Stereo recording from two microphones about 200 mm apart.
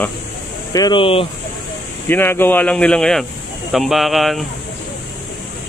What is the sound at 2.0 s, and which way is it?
Speech, 10° left (ahead or behind).